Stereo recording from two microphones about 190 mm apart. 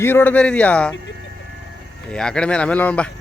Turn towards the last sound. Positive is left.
turn(degrees=10)  # may be behind; listen again after turning